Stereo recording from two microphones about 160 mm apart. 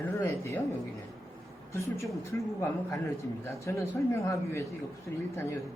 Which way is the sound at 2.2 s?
15° left (ahead or behind).